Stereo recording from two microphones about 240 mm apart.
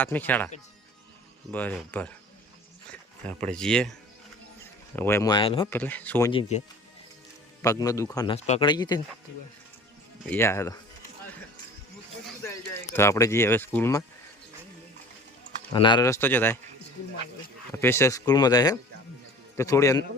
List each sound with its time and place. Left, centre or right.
0.0 s speech: centre
3.4 s speech: centre
5.7 s speech: centre
7.6 s speech: centre
10.2 s speech: centre
13.0 s speech: centre
15.7 s speech: centre
17.7 s speech: centre